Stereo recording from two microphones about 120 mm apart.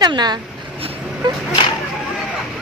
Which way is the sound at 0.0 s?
35° right (ahead or behind).